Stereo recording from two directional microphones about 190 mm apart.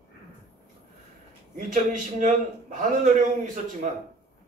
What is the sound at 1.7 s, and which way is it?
A man's voice, 45° right (ahead or behind).